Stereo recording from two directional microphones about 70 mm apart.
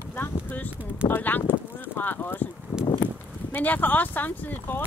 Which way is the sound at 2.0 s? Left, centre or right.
Left.